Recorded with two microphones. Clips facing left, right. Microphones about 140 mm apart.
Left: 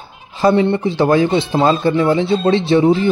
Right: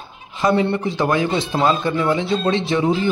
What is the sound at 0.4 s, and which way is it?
Speech, 30° left (ahead or behind).